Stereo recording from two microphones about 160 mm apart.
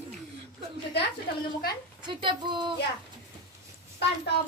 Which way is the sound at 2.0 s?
30° right (ahead or behind).